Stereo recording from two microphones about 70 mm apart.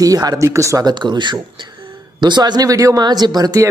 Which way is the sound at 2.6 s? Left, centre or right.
Right.